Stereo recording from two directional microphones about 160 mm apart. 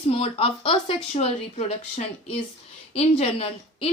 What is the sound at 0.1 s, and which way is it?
A woman's voice, 35° left (ahead or behind).